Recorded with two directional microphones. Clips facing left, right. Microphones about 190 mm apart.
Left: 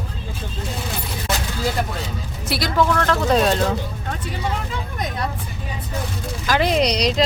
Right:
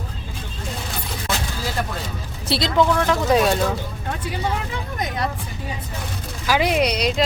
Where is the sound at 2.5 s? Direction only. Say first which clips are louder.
Right 1 dB; 20° right (ahead or behind).